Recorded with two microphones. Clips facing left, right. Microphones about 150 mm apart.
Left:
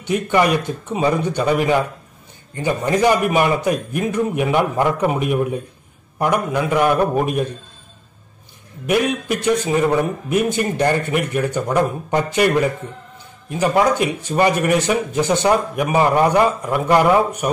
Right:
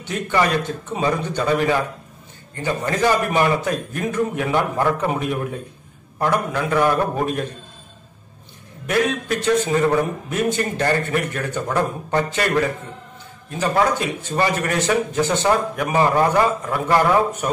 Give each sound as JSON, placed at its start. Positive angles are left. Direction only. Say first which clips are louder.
{"t": 0.1, "sound": "speech", "louder": "left 3 dB", "side_deg": 15}
{"t": 8.8, "sound": "speech", "louder": "left 2 dB", "side_deg": 15}